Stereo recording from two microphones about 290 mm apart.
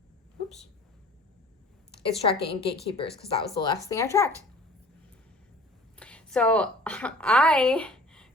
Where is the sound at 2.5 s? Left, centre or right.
Centre.